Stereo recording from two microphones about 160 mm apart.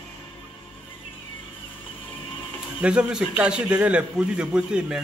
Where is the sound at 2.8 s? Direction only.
5° right (ahead or behind).